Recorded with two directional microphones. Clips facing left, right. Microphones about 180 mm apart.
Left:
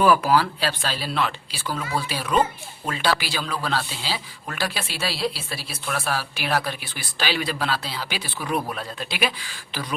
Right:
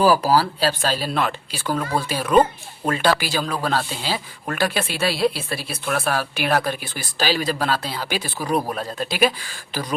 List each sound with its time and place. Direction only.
0.0 s speech: 35° right (ahead or behind)